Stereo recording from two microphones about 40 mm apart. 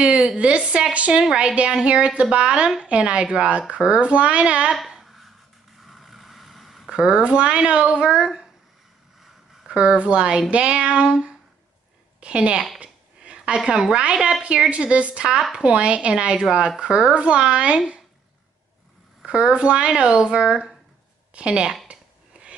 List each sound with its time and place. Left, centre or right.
0.0 s a child's voice: right
4.9 s a sound: centre
5.8 s vehicle: centre
6.9 s a sound: centre
7.2 s speech: right
9.7 s a woman's voice: right
12.8 s a sound: right
13.7 s speech: centre
14.7 s a child's voice: right
19.2 s speech: right
21.4 s speech: right
21.9 s a sound: right